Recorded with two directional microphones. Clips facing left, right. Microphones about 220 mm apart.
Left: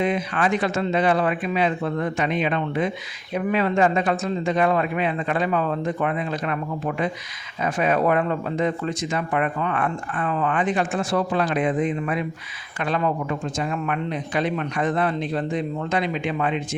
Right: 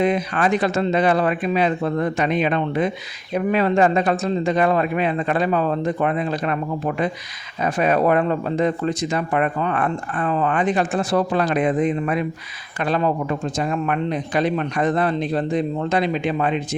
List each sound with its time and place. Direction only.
0.0 s speech: 40° right (ahead or behind)